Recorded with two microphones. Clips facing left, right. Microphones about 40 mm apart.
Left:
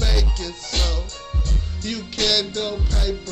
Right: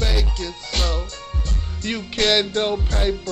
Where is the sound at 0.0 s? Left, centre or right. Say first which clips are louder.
Right 1 dB; centre.